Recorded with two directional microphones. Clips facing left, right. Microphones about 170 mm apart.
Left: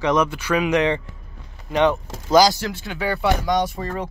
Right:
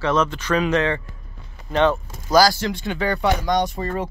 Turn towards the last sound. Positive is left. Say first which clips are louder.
# right 1 dB
turn(degrees=0)  # may be behind; listen again after turning